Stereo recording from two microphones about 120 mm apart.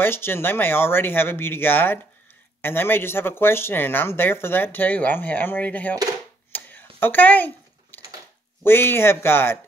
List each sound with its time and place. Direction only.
0.0 s speech: 20° left (ahead or behind)
6.5 s a sound: 15° left (ahead or behind)
8.6 s speech: 20° left (ahead or behind)